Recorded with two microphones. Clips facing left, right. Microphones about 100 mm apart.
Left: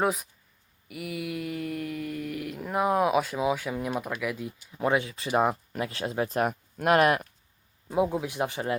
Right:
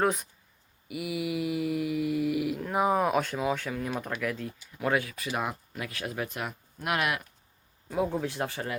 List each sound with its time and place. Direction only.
0.0 s mantra: 5° left (ahead or behind)
2.6 s speech: centre (ahead or behind)
4.8 s speech: 25° left (ahead or behind); by 7.3 s 40° left (ahead or behind)
7.9 s speech: 20° left (ahead or behind)